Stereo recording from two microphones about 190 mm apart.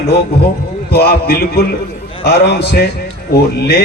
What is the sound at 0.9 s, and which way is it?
A man's voice, 55° left (ahead or behind).